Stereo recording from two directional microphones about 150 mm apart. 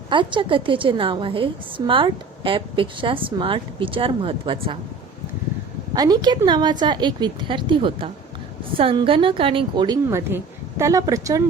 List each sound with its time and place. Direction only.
0.1 s a woman's voice: 35° right (ahead or behind)
5.9 s a woman's voice: 25° right (ahead or behind)